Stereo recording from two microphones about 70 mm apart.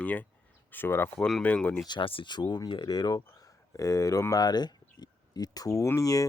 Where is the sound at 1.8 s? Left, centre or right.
Left.